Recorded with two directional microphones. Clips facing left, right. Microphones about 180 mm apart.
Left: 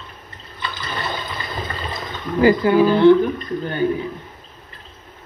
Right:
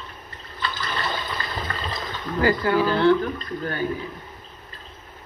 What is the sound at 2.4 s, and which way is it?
Speech, 20° left (ahead or behind).